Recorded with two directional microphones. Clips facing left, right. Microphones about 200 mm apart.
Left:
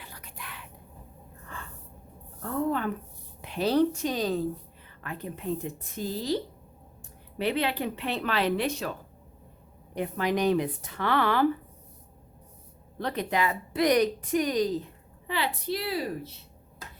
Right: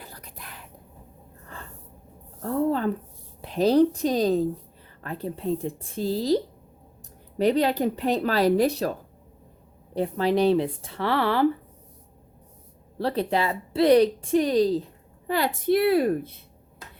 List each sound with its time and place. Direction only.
0.0 s whispering: 35° right (ahead or behind)
2.4 s a sound: 35° right (ahead or behind)
3.4 s a woman's voice: 35° right (ahead or behind)
13.0 s a woman's voice: 30° right (ahead or behind)
15.3 s a woman's voice: 45° right (ahead or behind)